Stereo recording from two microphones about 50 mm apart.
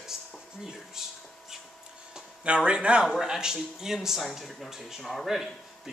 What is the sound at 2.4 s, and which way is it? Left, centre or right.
Speech, right.